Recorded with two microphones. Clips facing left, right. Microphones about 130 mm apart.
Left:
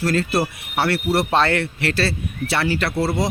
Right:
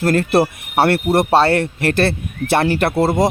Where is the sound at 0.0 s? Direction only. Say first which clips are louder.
Right 5 dB; 55° right (ahead or behind).